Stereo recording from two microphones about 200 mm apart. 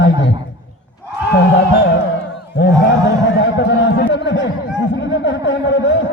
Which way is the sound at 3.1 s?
60° left (ahead or behind).